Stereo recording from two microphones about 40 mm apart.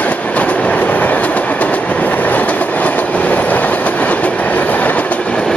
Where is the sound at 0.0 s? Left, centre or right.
Left.